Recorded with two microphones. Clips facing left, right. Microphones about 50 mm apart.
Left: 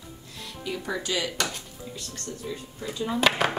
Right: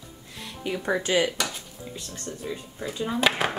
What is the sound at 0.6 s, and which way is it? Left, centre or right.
Speech, right.